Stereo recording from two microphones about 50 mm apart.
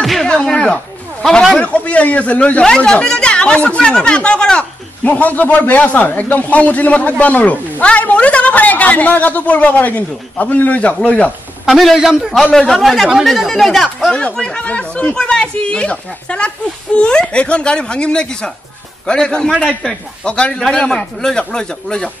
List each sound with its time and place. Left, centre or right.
0.0 s a sound: centre
0.3 s a sound: centre
1.6 s speech: left
2.6 s speech: centre
5.0 s a man's voice: left
11.7 s speech: centre
12.5 s speech: centre
14.4 s a man's voice: centre